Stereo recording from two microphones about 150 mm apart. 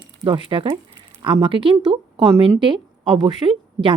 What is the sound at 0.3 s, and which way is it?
A woman's voice, 35° right (ahead or behind).